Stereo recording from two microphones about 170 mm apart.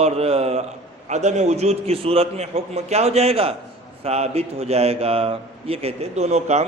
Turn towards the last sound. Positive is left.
turn(degrees=-40)  # may be behind; listen again after turning